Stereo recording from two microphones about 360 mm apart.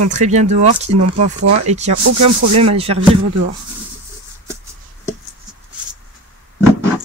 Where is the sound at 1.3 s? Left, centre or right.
Right.